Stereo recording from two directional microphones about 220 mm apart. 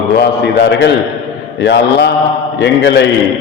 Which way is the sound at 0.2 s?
50° left (ahead or behind).